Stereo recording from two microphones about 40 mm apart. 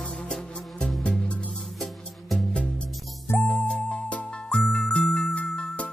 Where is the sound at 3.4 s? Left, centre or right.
Left.